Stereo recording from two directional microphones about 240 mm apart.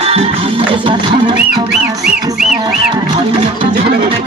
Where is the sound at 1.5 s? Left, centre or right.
Centre.